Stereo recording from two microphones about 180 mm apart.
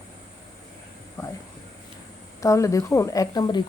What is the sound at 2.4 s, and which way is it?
Speech, 15° left (ahead or behind).